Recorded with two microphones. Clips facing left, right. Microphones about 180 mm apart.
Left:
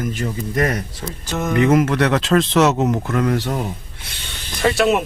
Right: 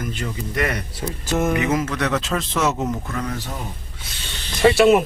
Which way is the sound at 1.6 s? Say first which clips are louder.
Left 6 dB; 65° left (ahead or behind).